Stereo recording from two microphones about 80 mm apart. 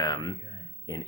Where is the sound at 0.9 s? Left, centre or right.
Left.